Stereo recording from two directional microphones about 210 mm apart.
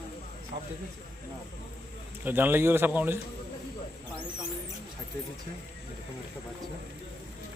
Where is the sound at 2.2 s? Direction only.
10° right (ahead or behind).